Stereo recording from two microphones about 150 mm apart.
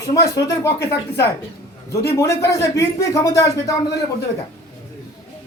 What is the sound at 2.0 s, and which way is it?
A man's voice, 20° left (ahead or behind).